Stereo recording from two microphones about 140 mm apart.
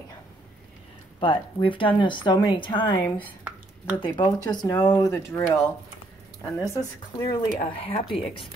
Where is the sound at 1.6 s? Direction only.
35° left (ahead or behind).